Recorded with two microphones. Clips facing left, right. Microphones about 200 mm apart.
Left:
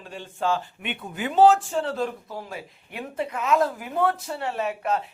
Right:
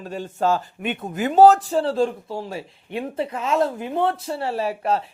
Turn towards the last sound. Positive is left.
turn(degrees=-30)  # may be behind; listen again after turning